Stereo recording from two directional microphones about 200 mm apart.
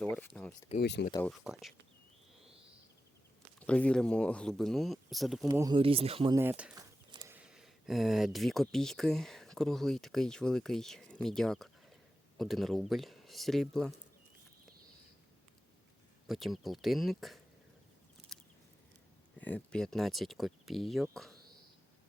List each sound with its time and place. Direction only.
0.0 s speech: 10° left (ahead or behind)
0.8 s speech: 60° left (ahead or behind)
1.2 s speech: centre (ahead or behind)
3.7 s speech: 5° left (ahead or behind)
5.5 s speech: 20° right (ahead or behind)
6.3 s speech: 10° right (ahead or behind)
6.7 s a sound: 20° right (ahead or behind)
7.3 s speech: 5° right (ahead or behind)
16.2 s speech: centre (ahead or behind)
18.3 s a sound: centre (ahead or behind)
19.4 s speech: 5° left (ahead or behind)